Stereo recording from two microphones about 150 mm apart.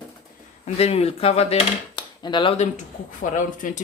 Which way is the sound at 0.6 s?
45° left (ahead or behind).